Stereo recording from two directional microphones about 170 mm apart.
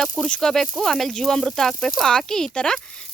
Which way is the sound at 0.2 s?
5° left (ahead or behind).